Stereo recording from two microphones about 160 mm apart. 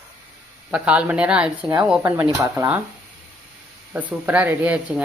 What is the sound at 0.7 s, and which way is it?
Speech, 5° right (ahead or behind).